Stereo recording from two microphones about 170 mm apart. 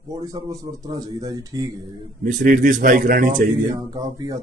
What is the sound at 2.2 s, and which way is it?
A man's voice, 50° right (ahead or behind).